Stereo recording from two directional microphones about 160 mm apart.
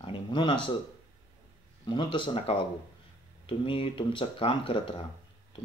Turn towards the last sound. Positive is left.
turn(degrees=35)  # may be behind; listen again after turning